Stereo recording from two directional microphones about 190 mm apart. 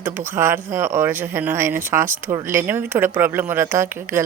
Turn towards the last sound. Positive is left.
turn(degrees=-10)  # may be behind; listen again after turning